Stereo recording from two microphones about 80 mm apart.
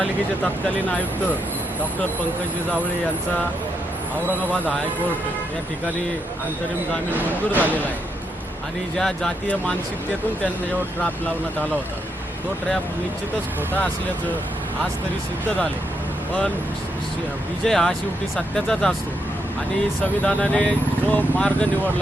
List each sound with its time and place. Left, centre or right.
7.1 s speech: right
9.0 s speech: centre
17.7 s speech: centre
20.2 s speech: centre